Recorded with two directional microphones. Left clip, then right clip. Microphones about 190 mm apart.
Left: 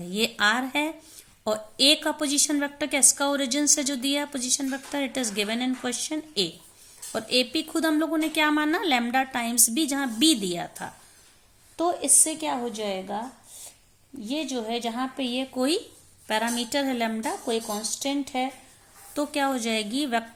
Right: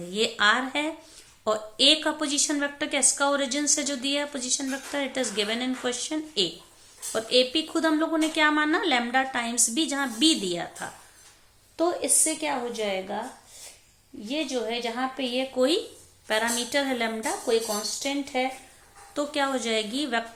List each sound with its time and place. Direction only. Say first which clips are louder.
0.1 s a woman's voice: right 1 dB; 40° left (ahead or behind)
14.3 s speech: right 1 dB; 35° left (ahead or behind)